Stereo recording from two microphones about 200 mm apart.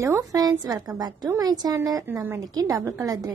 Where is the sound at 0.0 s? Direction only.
20° right (ahead or behind).